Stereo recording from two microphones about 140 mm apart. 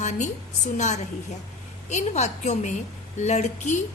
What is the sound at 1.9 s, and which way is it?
A woman's voice, 55° left (ahead or behind).